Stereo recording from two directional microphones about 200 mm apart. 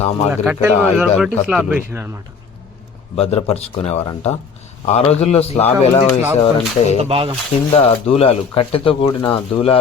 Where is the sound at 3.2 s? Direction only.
30° left (ahead or behind).